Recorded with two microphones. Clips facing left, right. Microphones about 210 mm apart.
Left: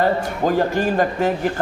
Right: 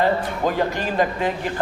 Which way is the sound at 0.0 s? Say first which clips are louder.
Left 1 dB; 45° left (ahead or behind).